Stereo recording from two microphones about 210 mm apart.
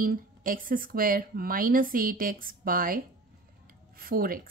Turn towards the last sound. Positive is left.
turn(degrees=-45)  # may be behind; listen again after turning